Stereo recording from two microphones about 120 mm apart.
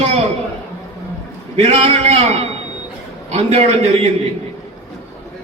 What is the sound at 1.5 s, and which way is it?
A man's voice, 65° right (ahead or behind).